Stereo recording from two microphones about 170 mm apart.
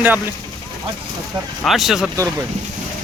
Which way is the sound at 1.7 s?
Centre (ahead or behind).